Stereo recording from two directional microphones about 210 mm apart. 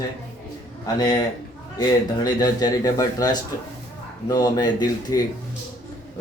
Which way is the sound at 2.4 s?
15° left (ahead or behind).